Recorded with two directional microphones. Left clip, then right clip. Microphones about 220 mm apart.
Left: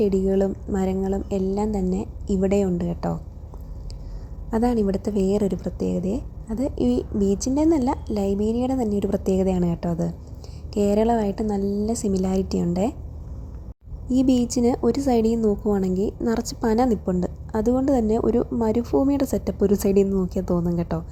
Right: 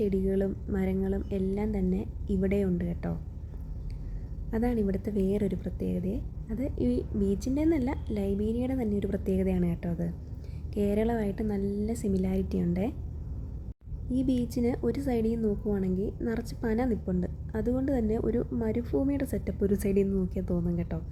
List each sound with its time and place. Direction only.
0.0 s a woman's voice: 15° left (ahead or behind)
4.5 s a woman's voice: 15° left (ahead or behind)
14.1 s a woman's voice: 20° left (ahead or behind)